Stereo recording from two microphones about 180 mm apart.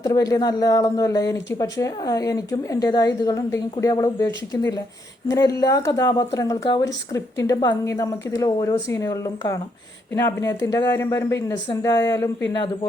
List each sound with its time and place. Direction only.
0.0 s speech: 20° left (ahead or behind)